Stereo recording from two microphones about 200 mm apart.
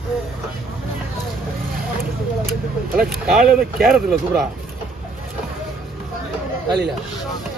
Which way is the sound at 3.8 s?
Centre (ahead or behind).